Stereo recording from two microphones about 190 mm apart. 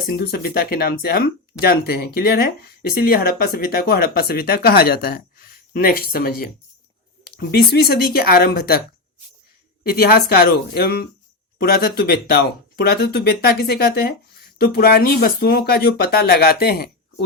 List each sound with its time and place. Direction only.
0.1 s speech: 55° left (ahead or behind)
9.8 s speech: 55° left (ahead or behind)